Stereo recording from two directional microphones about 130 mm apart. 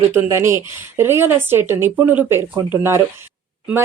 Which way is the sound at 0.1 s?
20° right (ahead or behind).